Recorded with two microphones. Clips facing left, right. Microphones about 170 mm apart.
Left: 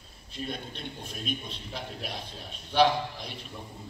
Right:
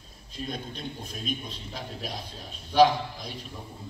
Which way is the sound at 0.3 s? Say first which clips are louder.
Right 1 dB; 40° right (ahead or behind).